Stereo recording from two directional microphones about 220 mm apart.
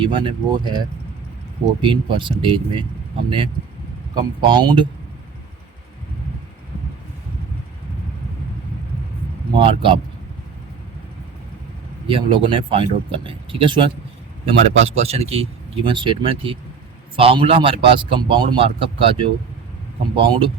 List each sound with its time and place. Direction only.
0.0 s speech: 20° right (ahead or behind)
9.6 s speech: 25° right (ahead or behind)
12.0 s speech: 25° right (ahead or behind)